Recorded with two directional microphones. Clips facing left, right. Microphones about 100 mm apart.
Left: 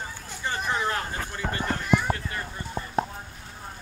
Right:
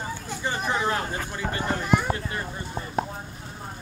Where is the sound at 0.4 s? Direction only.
15° right (ahead or behind).